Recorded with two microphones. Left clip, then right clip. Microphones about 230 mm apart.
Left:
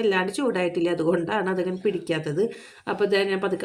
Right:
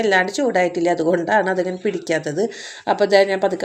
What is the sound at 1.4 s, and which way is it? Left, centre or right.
Speech, centre.